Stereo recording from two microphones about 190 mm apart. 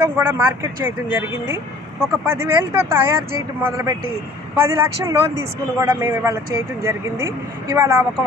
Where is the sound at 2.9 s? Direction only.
10° right (ahead or behind).